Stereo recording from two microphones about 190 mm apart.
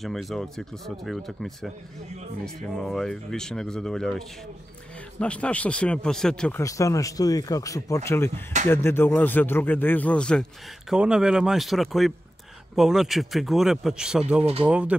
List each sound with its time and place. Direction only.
0.0 s speech: centre (ahead or behind)
5.2 s speech: 5° left (ahead or behind)
6.6 s speech: 15° left (ahead or behind); by 15.0 s 5° right (ahead or behind)